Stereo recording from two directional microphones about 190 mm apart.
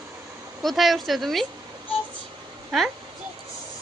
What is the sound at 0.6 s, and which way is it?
Speech, centre (ahead or behind).